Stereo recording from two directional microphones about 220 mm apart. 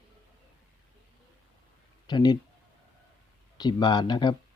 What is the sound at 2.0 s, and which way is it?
Speech, 20° left (ahead or behind).